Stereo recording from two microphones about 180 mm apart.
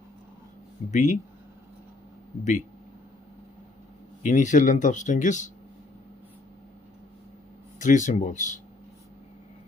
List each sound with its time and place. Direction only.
0.9 s speech: 45° left (ahead or behind)
4.2 s speech: 45° left (ahead or behind)
7.8 s speech: 45° left (ahead or behind)